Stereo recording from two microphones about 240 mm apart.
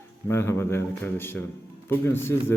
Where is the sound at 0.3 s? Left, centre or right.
Centre.